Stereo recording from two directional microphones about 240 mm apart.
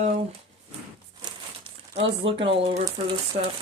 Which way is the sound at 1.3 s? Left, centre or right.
Right.